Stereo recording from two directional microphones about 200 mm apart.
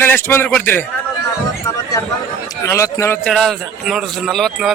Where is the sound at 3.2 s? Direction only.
Centre (ahead or behind).